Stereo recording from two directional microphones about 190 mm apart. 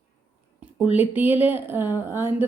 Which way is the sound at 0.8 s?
10° right (ahead or behind).